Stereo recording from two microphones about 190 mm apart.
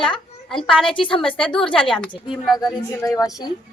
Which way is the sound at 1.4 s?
5° left (ahead or behind).